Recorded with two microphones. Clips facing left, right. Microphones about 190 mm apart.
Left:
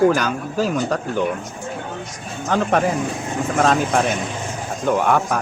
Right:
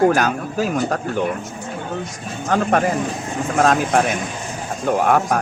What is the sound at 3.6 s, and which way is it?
Speech, 50° right (ahead or behind).